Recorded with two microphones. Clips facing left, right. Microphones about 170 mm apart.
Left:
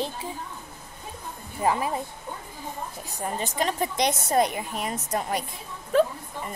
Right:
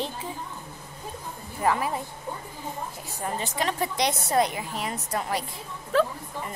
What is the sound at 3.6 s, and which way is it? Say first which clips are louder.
A woman's voice: left 1 dB; 20° left (ahead or behind).